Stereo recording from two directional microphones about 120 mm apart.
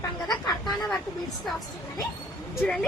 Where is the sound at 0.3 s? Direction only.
35° left (ahead or behind).